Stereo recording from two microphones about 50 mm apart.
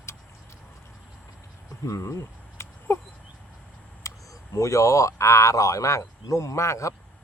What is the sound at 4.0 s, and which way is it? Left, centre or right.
Speech, left.